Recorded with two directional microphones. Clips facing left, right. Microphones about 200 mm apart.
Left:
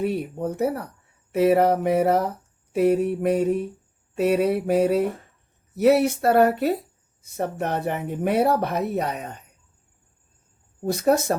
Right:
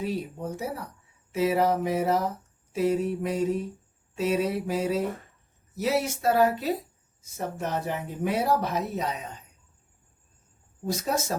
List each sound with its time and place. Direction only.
0.0 s speech: 60° left (ahead or behind)
10.8 s speech: 60° left (ahead or behind)